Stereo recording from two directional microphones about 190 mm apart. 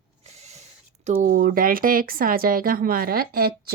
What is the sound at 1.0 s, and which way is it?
Speech, 40° right (ahead or behind).